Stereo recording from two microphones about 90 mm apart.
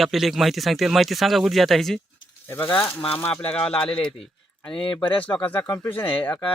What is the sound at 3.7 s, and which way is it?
Speech, 85° left.